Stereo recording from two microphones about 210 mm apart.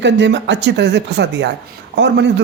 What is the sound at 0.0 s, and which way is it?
A man's voice, 55° right (ahead or behind).